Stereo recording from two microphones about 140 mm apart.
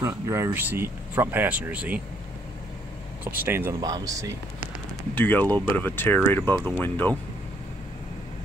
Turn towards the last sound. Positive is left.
turn(degrees=10)  # may be behind; listen again after turning